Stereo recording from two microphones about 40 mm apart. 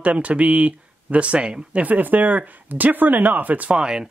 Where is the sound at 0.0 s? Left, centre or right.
Right.